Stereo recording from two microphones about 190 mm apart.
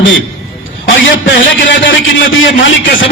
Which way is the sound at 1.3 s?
75° left (ahead or behind).